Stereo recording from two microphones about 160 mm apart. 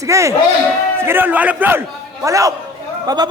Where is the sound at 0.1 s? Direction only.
20° right (ahead or behind).